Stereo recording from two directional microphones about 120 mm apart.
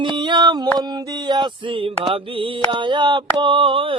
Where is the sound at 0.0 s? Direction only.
40° right (ahead or behind).